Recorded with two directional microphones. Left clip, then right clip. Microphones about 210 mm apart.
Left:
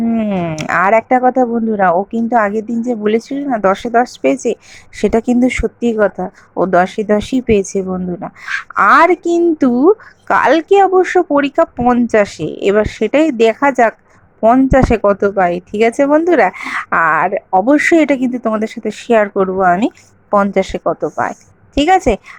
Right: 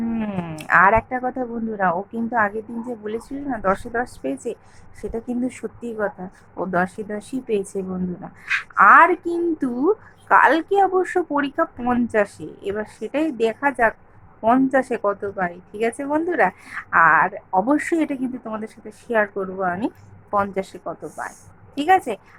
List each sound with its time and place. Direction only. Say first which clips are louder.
0.0 s a woman's voice: left 11 dB; 30° left (ahead or behind)